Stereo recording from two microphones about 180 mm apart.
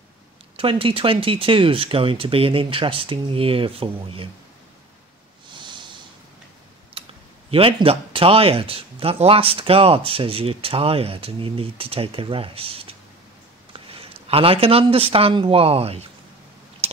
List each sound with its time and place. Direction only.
0.6 s speech: 30° right (ahead or behind)
7.0 s computer keyboard: 30° right (ahead or behind)
7.5 s speech: 30° right (ahead or behind)
16.8 s a sound: 35° right (ahead or behind)